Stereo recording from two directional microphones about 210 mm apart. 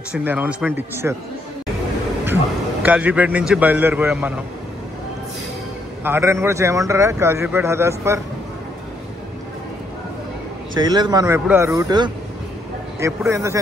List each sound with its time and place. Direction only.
0.1 s a man's voice: 5° right (ahead or behind)
2.8 s a man's voice: 5° right (ahead or behind)
6.0 s a man's voice: 10° right (ahead or behind)
10.8 s a man's voice: 20° right (ahead or behind)